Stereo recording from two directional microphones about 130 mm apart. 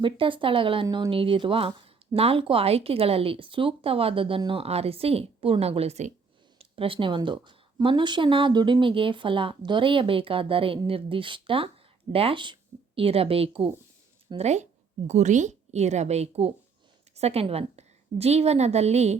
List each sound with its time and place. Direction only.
0.0 s speech: 40° right (ahead or behind)
14.3 s a woman's voice: 60° right (ahead or behind)